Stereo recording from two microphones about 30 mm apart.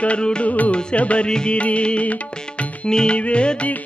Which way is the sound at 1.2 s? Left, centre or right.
Left.